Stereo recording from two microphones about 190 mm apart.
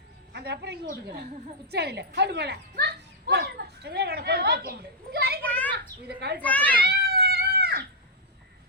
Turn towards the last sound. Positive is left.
turn(degrees=-55)  # may be behind; listen again after turning